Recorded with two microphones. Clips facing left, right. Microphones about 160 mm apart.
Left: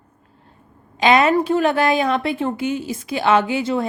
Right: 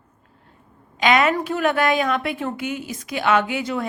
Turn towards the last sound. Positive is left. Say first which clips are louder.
# left 4 dB
turn(degrees=30)  # may be behind; listen again after turning